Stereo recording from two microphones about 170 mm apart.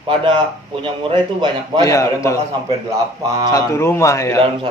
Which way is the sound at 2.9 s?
20° right (ahead or behind).